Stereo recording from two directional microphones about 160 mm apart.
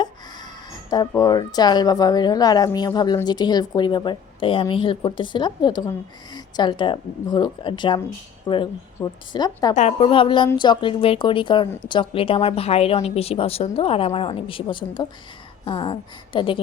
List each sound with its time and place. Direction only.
0.9 s a woman's voice: 25° left (ahead or behind)
9.7 s a woman's voice: 40° left (ahead or behind)